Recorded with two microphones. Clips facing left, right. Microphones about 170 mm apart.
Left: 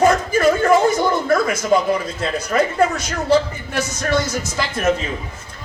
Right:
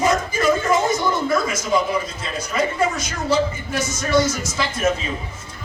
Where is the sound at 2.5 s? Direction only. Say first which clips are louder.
Left 4 dB; 55° left (ahead or behind).